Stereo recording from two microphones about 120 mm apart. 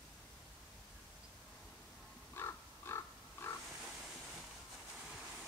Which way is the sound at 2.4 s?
20° left (ahead or behind).